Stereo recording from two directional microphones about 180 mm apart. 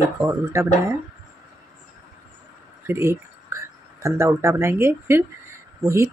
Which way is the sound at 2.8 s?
15° right (ahead or behind).